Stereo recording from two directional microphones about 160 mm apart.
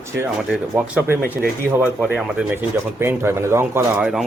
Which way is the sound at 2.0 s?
10° right (ahead or behind).